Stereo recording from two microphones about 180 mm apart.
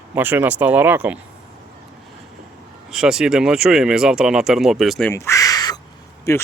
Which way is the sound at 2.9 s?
5° right (ahead or behind).